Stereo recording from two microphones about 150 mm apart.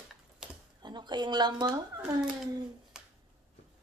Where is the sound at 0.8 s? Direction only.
30° right (ahead or behind).